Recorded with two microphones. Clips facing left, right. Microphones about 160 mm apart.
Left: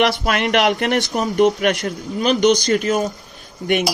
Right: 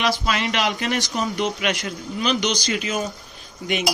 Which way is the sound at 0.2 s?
50° left (ahead or behind).